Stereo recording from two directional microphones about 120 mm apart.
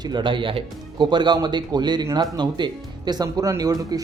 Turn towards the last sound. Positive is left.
turn(degrees=-30)  # may be behind; listen again after turning